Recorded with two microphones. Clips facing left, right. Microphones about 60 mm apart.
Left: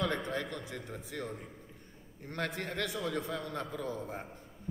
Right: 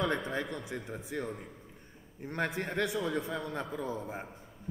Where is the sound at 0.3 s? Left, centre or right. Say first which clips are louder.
Right 2 dB; right.